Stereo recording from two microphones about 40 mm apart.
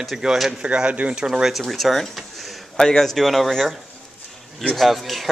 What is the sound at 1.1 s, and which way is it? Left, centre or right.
Speech, centre.